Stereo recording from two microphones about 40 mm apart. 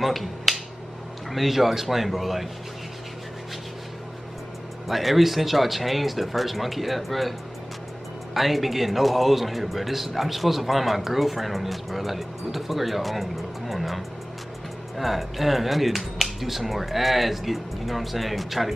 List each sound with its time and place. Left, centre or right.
0.0 s a man's voice: centre
4.8 s a man's voice: centre
8.4 s a man's voice: centre